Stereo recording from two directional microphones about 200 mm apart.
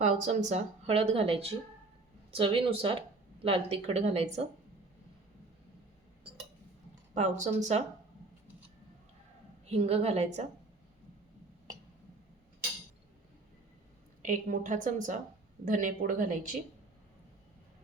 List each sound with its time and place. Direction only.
0.0 s speech: 35° right (ahead or behind)
7.1 s speech: 35° right (ahead or behind)
9.6 s speech: 30° right (ahead or behind)
14.2 s speech: 40° right (ahead or behind)